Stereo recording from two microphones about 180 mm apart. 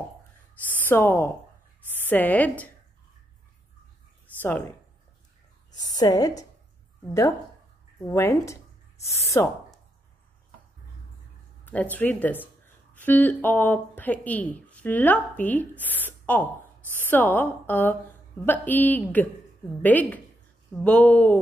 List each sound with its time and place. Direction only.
0.8 s a woman's voice: 10° left (ahead or behind)
4.4 s a woman's voice: 10° left (ahead or behind)
5.8 s a woman's voice: 20° left (ahead or behind)
8.0 s speech: 15° left (ahead or behind)
9.0 s speech: 35° left (ahead or behind)
11.6 s a woman's voice: 10° left (ahead or behind)